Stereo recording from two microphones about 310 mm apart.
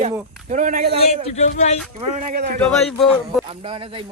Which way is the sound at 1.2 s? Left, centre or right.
Left.